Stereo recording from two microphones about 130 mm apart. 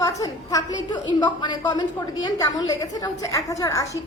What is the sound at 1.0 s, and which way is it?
A woman's voice, 35° left (ahead or behind).